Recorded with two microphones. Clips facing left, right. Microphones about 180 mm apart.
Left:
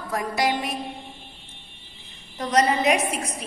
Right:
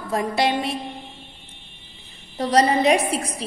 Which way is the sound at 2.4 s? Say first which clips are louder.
Right 3 dB; 30° right (ahead or behind).